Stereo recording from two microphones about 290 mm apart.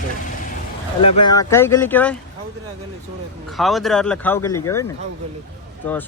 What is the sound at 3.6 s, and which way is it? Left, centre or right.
Speech, centre.